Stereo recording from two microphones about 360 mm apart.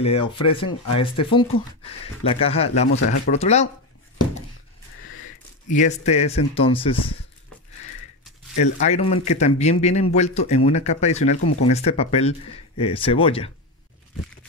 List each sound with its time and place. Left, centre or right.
0.0 s speech: centre
5.7 s speech: centre
8.5 s a man's voice: centre